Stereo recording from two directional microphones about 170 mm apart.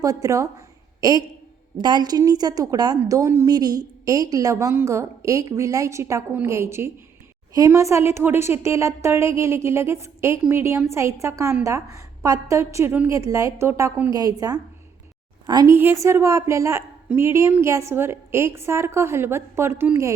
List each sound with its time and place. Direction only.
0.0 s a woman's voice: 20° right (ahead or behind)
1.8 s a woman's voice: 25° right (ahead or behind)
15.7 s a woman's voice: 15° right (ahead or behind)